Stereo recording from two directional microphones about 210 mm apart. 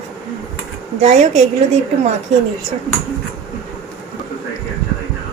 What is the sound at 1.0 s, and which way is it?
Speech, 35° right (ahead or behind).